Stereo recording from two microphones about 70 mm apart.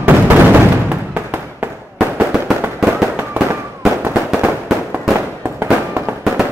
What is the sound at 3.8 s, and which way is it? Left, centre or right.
Fireworks, centre.